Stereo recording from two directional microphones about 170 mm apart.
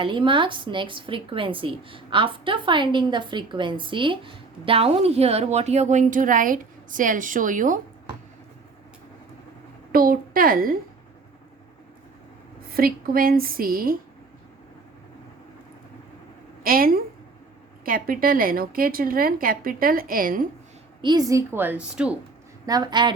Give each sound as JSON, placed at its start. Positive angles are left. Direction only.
{"t": 0.0, "sound": "a woman's voice", "side_deg": -30}
{"t": 9.9, "sound": "a woman's voice", "side_deg": -55}
{"t": 12.7, "sound": "a woman's voice", "side_deg": -60}
{"t": 16.6, "sound": "a woman's voice", "side_deg": -60}
{"t": 21.0, "sound": "a woman's voice", "side_deg": -25}
{"t": 22.6, "sound": "a woman's voice", "side_deg": -25}